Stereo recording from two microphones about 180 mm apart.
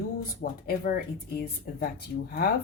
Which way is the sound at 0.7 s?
55° left (ahead or behind).